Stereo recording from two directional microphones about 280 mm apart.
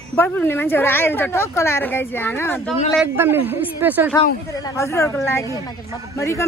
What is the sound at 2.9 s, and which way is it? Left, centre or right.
A man's voice, centre.